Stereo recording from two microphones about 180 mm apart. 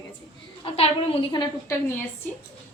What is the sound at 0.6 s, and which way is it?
Speech, 30° left (ahead or behind).